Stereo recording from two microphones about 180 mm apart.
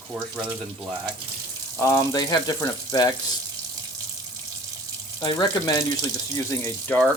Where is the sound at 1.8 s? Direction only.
15° left (ahead or behind).